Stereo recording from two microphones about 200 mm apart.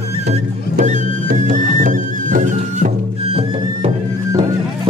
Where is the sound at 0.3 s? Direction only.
35° right (ahead or behind).